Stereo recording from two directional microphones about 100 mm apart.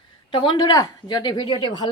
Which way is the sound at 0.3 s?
50° left (ahead or behind).